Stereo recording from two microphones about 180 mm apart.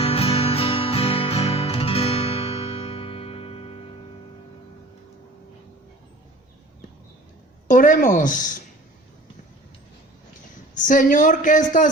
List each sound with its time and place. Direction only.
0.0 s music: 35° left (ahead or behind)
7.7 s a man's voice: 45° left (ahead or behind)
10.8 s a man's voice: 45° left (ahead or behind)